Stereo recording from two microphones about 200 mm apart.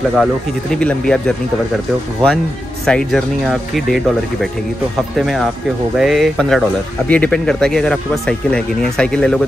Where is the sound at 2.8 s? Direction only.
5° left (ahead or behind).